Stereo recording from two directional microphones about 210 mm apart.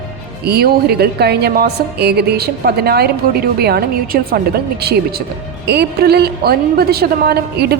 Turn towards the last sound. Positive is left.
turn(degrees=-50)  # may be behind; listen again after turning